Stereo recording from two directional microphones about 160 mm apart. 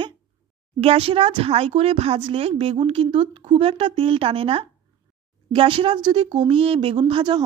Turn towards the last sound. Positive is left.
turn(degrees=-30)  # may be behind; listen again after turning